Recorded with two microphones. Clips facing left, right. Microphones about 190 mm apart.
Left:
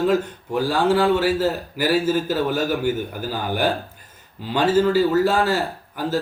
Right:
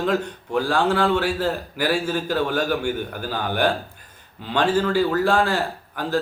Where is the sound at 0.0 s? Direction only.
5° left (ahead or behind).